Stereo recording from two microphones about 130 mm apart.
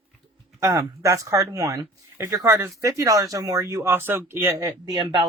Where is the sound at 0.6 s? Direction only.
25° right (ahead or behind).